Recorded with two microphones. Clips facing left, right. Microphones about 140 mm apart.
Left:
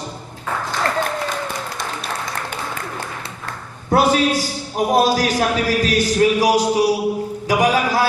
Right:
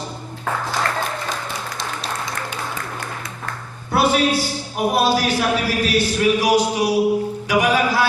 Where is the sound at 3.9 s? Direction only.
40° left (ahead or behind).